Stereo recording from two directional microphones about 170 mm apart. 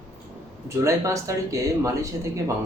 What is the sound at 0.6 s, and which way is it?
Speech, 20° right (ahead or behind).